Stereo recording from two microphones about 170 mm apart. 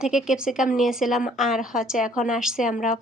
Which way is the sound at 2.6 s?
50° left (ahead or behind).